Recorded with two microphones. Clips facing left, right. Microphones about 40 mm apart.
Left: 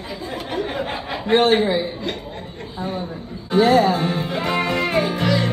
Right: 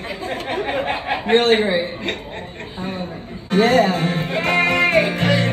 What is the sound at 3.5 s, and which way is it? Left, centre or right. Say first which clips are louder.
Speech: even; right.